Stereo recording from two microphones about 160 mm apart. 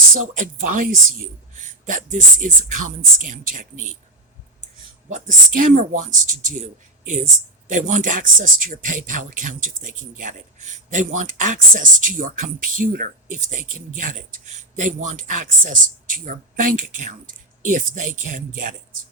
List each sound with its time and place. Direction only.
0.1 s speech: 55° right (ahead or behind)
5.0 s speech: 50° right (ahead or behind)
7.7 s speech: 50° right (ahead or behind)